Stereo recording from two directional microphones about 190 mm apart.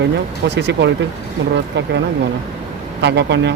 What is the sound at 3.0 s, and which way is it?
Speech, 65° right (ahead or behind).